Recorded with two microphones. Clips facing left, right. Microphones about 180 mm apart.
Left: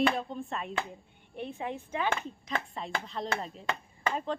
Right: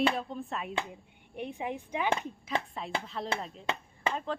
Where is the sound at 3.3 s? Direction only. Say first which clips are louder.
Right 1 dB; 25° right (ahead or behind).